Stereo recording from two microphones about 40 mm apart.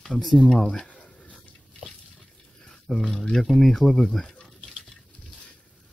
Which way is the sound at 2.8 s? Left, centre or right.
Centre.